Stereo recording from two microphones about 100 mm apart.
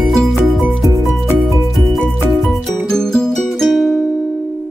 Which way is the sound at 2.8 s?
5° left (ahead or behind).